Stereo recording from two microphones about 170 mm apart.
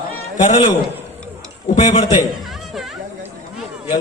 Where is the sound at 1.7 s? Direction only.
45° left (ahead or behind).